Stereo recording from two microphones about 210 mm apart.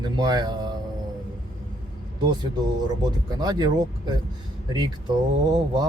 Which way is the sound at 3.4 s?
20° right (ahead or behind).